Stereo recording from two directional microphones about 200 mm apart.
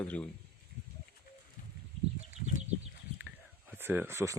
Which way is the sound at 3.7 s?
10° right (ahead or behind).